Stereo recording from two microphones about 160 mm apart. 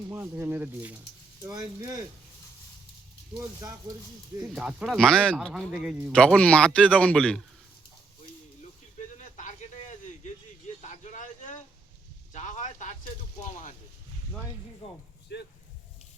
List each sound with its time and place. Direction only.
0.1 s speech: 15° right (ahead or behind)
1.4 s speech: 25° right (ahead or behind)
4.4 s a man's voice: 5° right (ahead or behind)
6.1 s a man's voice: 5° left (ahead or behind)
9.1 s a sound: 50° left (ahead or behind)
14.8 s speech: 35° left (ahead or behind)
15.3 s speech: 90° left